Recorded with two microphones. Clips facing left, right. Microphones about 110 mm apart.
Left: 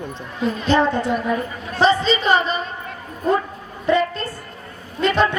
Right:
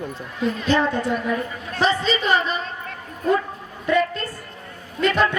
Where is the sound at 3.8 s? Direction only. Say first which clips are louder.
Left 2 dB; 30° left (ahead or behind).